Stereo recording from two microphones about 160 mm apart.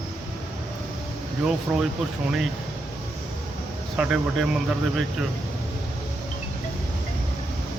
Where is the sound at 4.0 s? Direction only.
5° right (ahead or behind).